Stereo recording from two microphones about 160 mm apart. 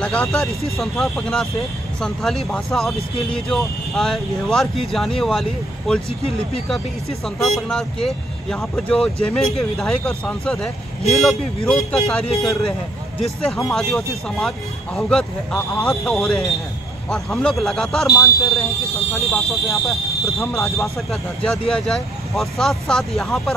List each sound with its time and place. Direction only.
0.0 s speech: 5° left (ahead or behind)
7.2 s speech: centre (ahead or behind)
18.0 s speech: 20° left (ahead or behind)
19.1 s speech: centre (ahead or behind)